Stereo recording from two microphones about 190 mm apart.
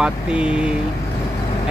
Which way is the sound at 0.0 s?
5° right (ahead or behind).